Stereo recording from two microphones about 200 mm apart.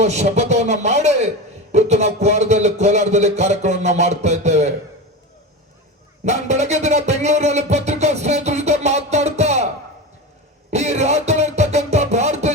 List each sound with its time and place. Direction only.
0.0 s a man's voice: 35° right (ahead or behind)
6.2 s music: 35° right (ahead or behind)
10.7 s music: 35° right (ahead or behind)